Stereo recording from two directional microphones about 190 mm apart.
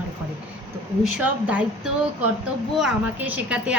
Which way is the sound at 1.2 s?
10° right (ahead or behind).